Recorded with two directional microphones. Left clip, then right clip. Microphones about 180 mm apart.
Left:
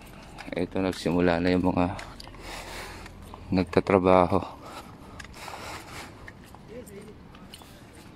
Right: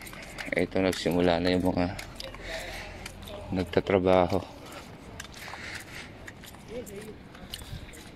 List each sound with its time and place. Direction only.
0.5 s speech: 15° left (ahead or behind)
1.0 s speech: 30° left (ahead or behind)
1.8 s speech: 20° left (ahead or behind)
3.5 s speech: 15° left (ahead or behind)